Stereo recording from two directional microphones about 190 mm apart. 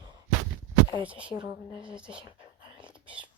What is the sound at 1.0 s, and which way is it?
A woman's voice, 5° right (ahead or behind).